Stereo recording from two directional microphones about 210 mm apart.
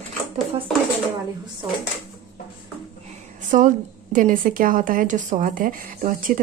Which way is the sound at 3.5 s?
40° right (ahead or behind).